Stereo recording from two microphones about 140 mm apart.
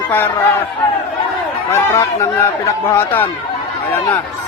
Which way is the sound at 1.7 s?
20° left (ahead or behind).